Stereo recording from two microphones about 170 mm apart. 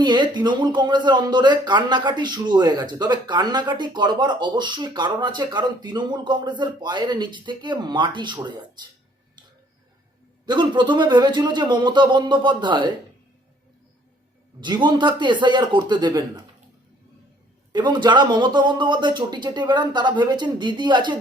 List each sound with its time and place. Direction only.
0.0 s speech: 25° right (ahead or behind)
10.4 s speech: 25° right (ahead or behind)
14.6 s speech: 25° right (ahead or behind)
17.7 s speech: 25° right (ahead or behind)